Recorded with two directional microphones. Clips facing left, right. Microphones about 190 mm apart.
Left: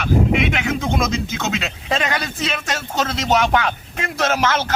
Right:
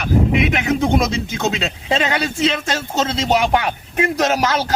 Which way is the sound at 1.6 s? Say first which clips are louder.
Right 3 dB; 25° right (ahead or behind).